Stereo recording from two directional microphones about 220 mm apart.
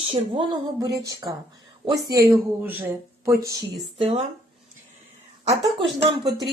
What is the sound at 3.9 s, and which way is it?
Speech, 25° right (ahead or behind).